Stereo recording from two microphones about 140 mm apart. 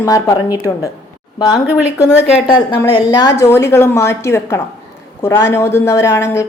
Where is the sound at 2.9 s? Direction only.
30° left (ahead or behind).